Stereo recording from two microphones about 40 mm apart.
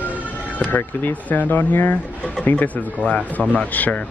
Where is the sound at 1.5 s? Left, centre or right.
Left.